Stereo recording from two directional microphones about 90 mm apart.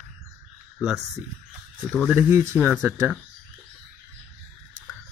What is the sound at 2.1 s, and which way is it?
Speech, 30° right (ahead or behind).